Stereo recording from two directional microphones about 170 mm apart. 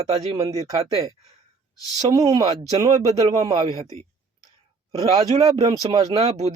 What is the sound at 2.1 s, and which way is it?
Speech, 20° right (ahead or behind).